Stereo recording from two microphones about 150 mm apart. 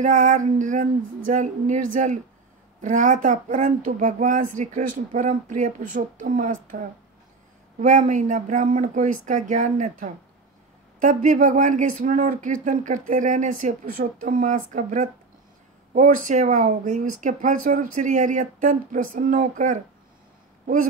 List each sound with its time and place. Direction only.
0.0 s speech: 55° right (ahead or behind)
7.8 s speech: 55° right (ahead or behind)